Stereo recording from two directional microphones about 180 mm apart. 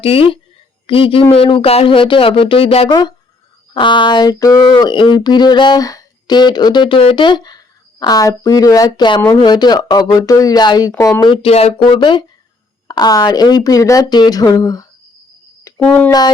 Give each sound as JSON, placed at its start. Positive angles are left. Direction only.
{"t": 0.0, "sound": "speech", "side_deg": 30}
{"t": 15.8, "sound": "speech", "side_deg": 0}